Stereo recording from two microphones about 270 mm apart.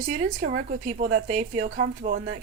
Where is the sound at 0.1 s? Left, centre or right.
Right.